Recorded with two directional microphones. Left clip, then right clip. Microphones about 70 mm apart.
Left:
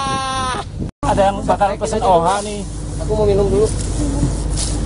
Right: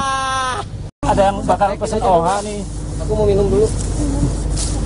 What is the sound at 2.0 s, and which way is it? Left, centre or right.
Speech, centre.